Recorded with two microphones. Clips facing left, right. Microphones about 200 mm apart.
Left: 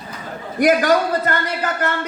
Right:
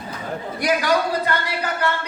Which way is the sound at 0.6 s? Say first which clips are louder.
Left 5 dB; 50° left (ahead or behind).